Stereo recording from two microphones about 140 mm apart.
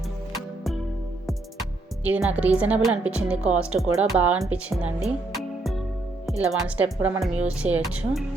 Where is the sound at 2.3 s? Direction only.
10° right (ahead or behind).